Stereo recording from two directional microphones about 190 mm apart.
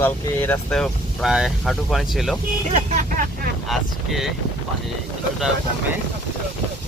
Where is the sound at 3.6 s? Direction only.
Centre (ahead or behind).